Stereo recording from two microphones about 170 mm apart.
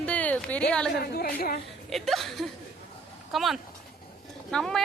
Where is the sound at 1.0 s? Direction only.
65° left (ahead or behind).